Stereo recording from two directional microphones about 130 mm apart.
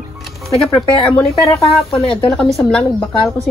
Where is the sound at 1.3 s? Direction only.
25° left (ahead or behind).